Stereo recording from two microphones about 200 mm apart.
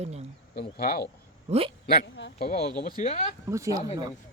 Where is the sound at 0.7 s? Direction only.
50° left (ahead or behind).